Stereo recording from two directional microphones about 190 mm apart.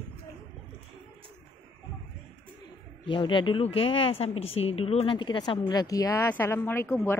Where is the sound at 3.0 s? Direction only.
25° left (ahead or behind).